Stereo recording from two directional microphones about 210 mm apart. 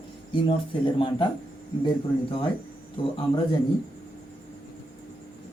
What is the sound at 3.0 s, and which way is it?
Speech, 20° left (ahead or behind).